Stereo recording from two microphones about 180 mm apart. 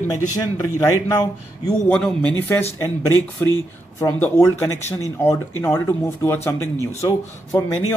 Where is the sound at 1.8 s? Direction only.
5° left (ahead or behind).